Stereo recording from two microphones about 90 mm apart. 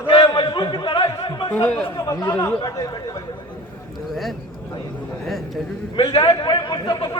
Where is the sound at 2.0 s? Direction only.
45° left (ahead or behind).